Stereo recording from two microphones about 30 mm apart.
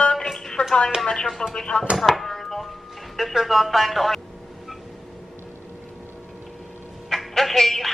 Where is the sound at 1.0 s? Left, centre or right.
Left.